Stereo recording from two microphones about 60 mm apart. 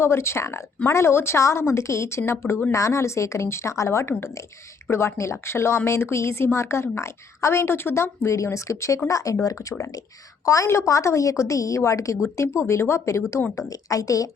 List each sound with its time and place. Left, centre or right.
0.0 s a woman's voice: left
13.6 s a woman's voice: left